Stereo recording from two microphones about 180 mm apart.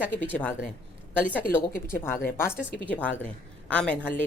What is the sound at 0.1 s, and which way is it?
Speech, 10° left (ahead or behind).